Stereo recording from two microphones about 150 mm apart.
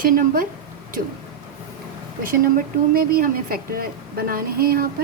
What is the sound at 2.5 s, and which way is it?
A woman's voice, 80° right.